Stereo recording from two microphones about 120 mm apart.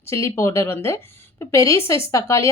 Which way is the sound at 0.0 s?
25° left (ahead or behind).